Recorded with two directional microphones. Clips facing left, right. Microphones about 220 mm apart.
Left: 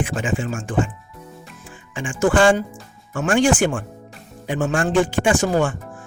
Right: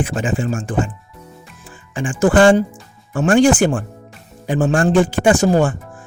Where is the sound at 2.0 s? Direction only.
35° right (ahead or behind).